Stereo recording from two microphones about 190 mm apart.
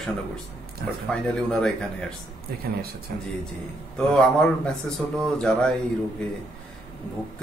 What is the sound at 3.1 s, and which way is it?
Speech, 50° right (ahead or behind).